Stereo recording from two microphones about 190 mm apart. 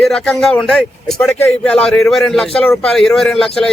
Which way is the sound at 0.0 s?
Centre (ahead or behind).